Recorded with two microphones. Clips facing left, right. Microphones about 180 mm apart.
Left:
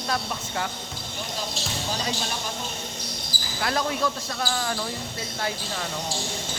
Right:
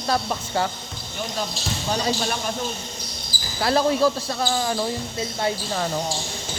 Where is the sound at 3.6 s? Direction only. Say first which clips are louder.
Right 7 dB; 30° right (ahead or behind).